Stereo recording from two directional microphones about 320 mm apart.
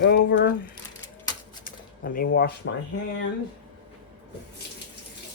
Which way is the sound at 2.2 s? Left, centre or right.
Left.